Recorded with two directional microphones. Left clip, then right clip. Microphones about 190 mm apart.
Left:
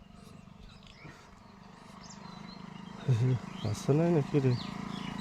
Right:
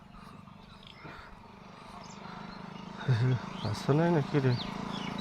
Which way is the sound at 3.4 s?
35° left (ahead or behind).